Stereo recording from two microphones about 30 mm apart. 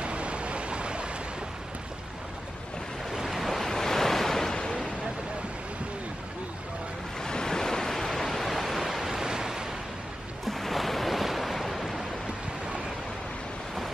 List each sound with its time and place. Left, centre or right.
0.0 s a sound: right
3.3 s waves: centre
3.5 s waves: centre
4.6 s a sound: left
7.2 s waves: centre
8.8 s waves: centre
10.4 s waves: centre